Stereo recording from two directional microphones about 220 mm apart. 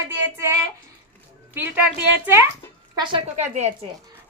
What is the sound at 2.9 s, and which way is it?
Speech, 20° right (ahead or behind).